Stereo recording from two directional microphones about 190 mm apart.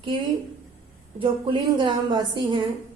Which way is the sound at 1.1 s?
25° right (ahead or behind).